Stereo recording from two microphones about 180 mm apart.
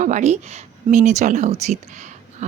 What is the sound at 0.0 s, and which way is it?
Speech, 40° right (ahead or behind).